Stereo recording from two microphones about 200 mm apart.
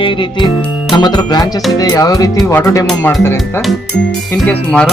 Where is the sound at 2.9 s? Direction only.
Centre (ahead or behind).